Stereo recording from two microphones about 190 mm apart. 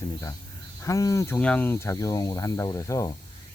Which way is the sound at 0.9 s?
15° left (ahead or behind).